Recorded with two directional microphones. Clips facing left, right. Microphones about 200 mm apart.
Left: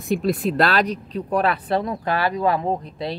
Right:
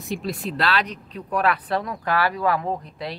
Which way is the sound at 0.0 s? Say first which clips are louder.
Left 7 dB; 50° left (ahead or behind).